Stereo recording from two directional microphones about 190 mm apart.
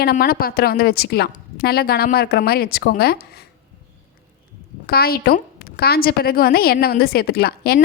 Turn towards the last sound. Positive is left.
turn(degrees=55)  # may be behind; listen again after turning